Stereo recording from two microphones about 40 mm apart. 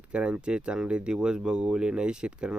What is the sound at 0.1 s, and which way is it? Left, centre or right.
Speech, right.